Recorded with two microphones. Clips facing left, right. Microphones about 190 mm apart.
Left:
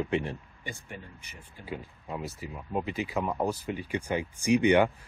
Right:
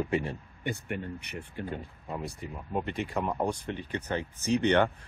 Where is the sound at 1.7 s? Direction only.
5° left (ahead or behind).